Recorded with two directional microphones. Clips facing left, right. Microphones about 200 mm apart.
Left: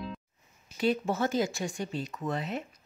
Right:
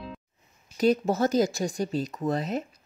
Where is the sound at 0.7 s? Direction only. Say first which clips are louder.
Right 5 dB; 40° right (ahead or behind).